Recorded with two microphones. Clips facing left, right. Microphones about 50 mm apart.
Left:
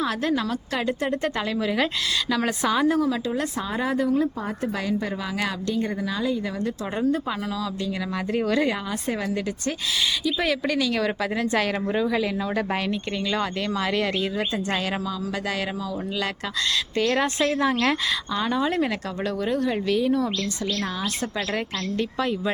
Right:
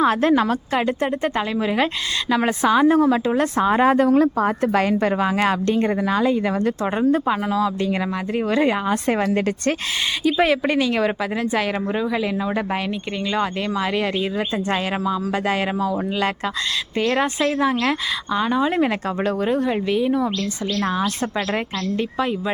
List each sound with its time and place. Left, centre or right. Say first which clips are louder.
0.0 s speech: right 8 dB; right
3.7 s a woman's voice: right 8 dB; right
6.9 s speech: right 4 dB; right
10.4 s speech: right 5 dB; right
11.5 s a woman's voice: right 1 dB; centre
15.0 s speech: right 6 dB; right
17.0 s a woman's voice: right 3 dB; centre